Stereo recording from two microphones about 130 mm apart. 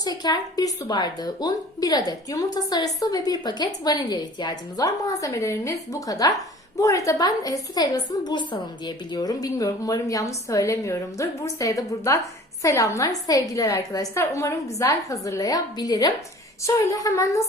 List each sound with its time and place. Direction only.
0.0 s a woman's voice: 30° left (ahead or behind)
9.1 s a woman's voice: 30° left (ahead or behind)